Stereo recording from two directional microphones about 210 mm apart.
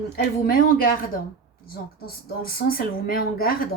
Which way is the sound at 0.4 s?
45° left (ahead or behind).